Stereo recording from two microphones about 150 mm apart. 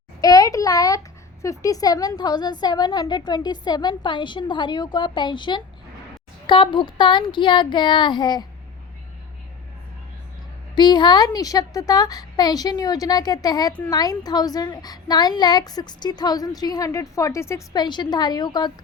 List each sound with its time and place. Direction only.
0.2 s speech: 25° left (ahead or behind)
10.8 s speech: 30° left (ahead or behind)